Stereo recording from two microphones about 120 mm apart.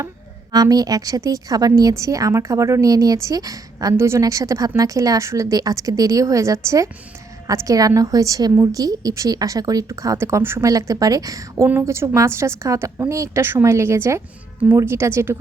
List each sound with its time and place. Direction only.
0.5 s a woman's voice: 30° right (ahead or behind)